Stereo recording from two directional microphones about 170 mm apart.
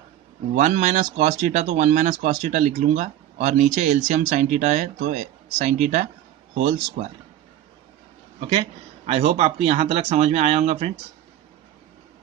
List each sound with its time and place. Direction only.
0.6 s speech: 45° right (ahead or behind)
8.4 s a man's voice: 35° right (ahead or behind)